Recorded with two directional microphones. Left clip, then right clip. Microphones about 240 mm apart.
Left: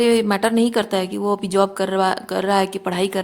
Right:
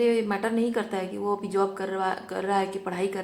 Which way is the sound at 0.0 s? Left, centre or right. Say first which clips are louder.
Left 7 dB; left.